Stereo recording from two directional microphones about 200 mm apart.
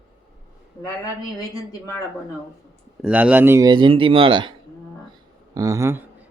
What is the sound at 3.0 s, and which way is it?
Speech, 5° right (ahead or behind).